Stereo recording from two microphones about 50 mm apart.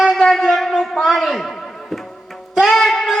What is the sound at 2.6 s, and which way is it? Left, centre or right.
Music, centre.